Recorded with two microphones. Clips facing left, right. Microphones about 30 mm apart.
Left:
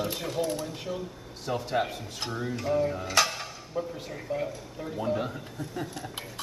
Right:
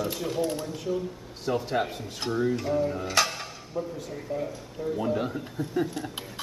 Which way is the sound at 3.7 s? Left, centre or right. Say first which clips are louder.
Right 1 dB; left.